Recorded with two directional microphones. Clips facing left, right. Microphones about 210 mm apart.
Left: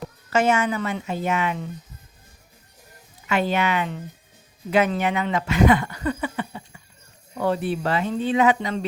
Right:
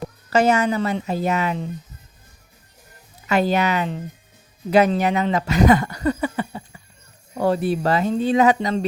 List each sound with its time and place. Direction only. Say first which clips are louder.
0.3 s speech: right 3 dB; 35° right (ahead or behind)
3.2 s speech: right 3 dB; 40° right (ahead or behind)